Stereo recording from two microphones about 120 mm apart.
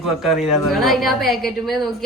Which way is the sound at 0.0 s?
Centre (ahead or behind).